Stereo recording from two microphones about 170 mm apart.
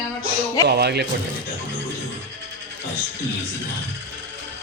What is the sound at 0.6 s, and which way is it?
Speech, 75° right (ahead or behind).